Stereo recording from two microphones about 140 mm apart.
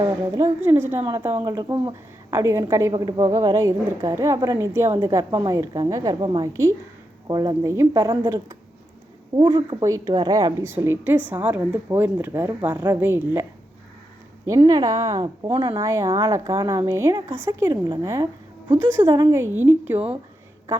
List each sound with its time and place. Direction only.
0.0 s a woman's voice: 15° right (ahead or behind)
2.3 s a woman's voice: 20° right (ahead or behind)
6.5 s a woman's voice: 20° right (ahead or behind)
10.6 s a woman's voice: 20° right (ahead or behind)
14.4 s a woman's voice: 25° right (ahead or behind)
15.2 s speech: 40° right (ahead or behind)
15.8 s a woman's voice: 20° right (ahead or behind)